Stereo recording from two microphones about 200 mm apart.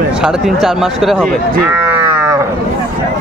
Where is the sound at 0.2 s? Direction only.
Centre (ahead or behind).